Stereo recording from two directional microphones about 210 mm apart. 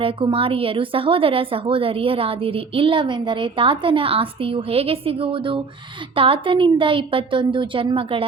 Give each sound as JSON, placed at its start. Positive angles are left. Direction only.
{"t": 0.0, "sound": "a woman's voice", "side_deg": -25}